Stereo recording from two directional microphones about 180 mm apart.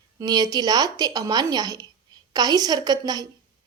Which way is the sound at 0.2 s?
20° right (ahead or behind).